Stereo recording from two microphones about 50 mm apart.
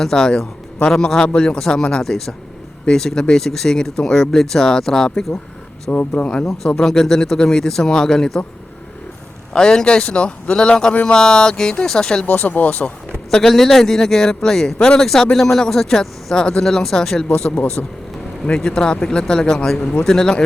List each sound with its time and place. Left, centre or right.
0.0 s speech: centre
5.9 s speech: left
6.4 s speech: centre
9.5 s speech: centre
12.2 s speech: left
13.3 s speech: centre
17.8 s speech: left
18.4 s speech: centre